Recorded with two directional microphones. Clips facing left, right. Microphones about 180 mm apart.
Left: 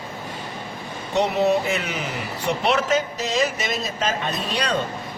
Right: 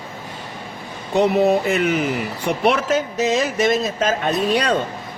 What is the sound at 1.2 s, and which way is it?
Speech, 55° right (ahead or behind).